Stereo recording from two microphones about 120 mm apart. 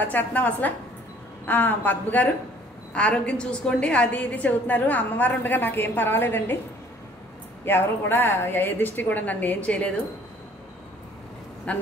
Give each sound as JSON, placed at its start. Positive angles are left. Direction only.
{"t": 0.0, "sound": "a woman's voice", "side_deg": 15}
{"t": 7.6, "sound": "a woman's voice", "side_deg": 15}
{"t": 11.7, "sound": "a woman's voice", "side_deg": 10}